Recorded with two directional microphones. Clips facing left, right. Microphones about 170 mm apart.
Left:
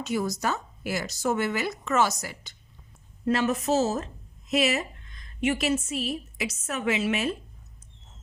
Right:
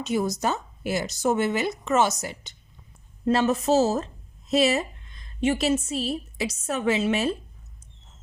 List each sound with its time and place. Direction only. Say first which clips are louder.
0.0 s a woman's voice: right 3 dB; 20° right (ahead or behind)